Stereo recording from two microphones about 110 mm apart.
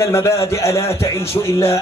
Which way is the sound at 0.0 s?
25° left (ahead or behind).